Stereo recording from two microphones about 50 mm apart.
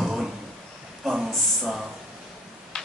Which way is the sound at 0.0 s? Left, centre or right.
Centre.